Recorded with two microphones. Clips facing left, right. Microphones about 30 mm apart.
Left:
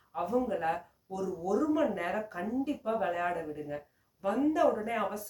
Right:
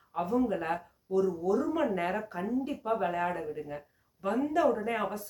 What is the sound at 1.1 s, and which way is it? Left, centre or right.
Speech, right.